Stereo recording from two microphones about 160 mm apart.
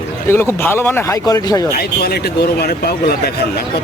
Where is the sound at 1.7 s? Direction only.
75° left (ahead or behind).